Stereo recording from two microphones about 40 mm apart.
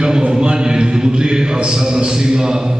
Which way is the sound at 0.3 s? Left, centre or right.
Centre.